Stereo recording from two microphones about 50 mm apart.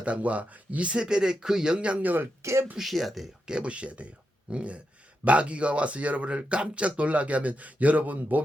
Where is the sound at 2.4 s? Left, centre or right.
Right.